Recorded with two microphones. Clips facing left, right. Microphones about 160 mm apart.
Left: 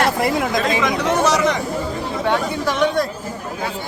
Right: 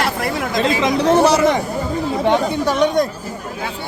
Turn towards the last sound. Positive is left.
turn(degrees=-20)  # may be behind; listen again after turning